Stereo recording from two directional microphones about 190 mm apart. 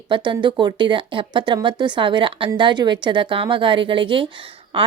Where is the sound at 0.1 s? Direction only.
25° right (ahead or behind).